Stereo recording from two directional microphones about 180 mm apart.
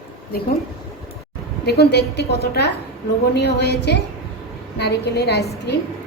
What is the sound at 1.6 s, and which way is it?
A woman's voice, 65° left (ahead or behind).